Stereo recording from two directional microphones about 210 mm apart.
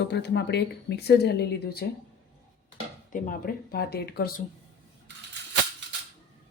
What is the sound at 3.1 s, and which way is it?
Speech, 40° left (ahead or behind).